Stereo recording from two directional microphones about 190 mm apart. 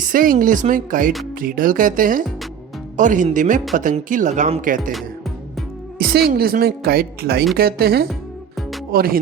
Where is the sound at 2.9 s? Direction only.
40° right (ahead or behind).